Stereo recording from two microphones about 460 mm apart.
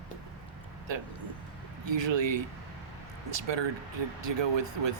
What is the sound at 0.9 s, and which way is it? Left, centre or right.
Speech, right.